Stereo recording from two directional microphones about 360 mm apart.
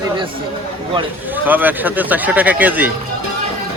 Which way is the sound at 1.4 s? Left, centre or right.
Centre.